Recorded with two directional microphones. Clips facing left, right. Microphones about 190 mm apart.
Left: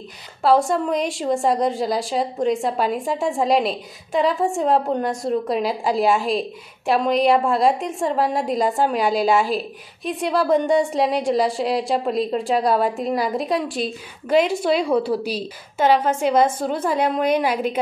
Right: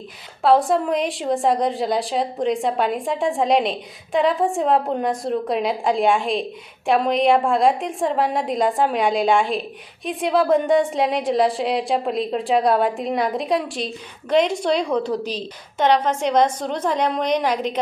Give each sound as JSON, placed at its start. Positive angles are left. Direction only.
{"t": 0.4, "sound": "a woman's voice", "side_deg": 0}